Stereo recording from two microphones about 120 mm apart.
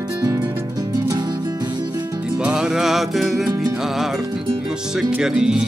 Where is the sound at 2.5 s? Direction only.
5° right (ahead or behind).